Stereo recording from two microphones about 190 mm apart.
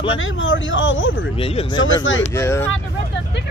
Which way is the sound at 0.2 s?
90° left.